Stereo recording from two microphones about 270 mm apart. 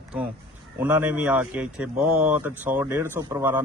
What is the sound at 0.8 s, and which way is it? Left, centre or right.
A man's voice, centre.